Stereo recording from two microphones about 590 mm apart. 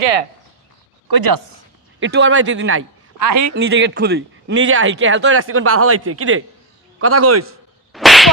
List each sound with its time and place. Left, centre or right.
0.0 s speech: right
1.0 s speech: right
2.0 s speech: centre
3.2 s a man's voice: right
3.5 s speech: centre
7.9 s a sound: centre